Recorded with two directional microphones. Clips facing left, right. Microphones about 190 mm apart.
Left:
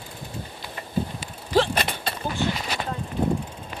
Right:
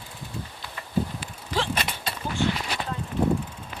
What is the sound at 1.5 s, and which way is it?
Vehicle, 40° left (ahead or behind).